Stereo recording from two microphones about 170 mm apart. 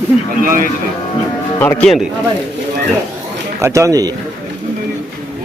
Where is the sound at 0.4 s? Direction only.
55° right (ahead or behind).